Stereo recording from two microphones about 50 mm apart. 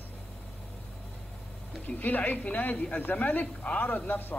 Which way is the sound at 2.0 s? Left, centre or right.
Left.